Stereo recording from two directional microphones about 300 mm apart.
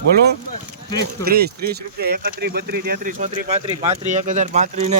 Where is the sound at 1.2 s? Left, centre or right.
Right.